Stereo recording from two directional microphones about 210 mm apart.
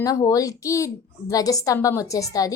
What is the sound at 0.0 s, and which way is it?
A woman's voice, 15° left (ahead or behind).